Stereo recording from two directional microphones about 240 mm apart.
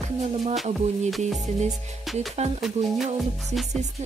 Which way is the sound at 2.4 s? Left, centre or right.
Right.